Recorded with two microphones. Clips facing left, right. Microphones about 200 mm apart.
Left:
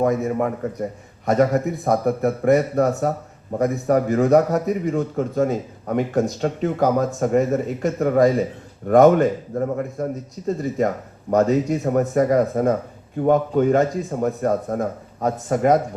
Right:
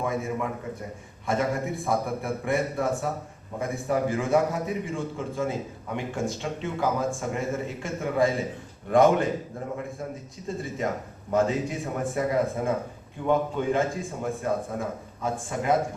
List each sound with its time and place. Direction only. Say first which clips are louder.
0.0 s a man's voice: left 9 dB; 40° left (ahead or behind)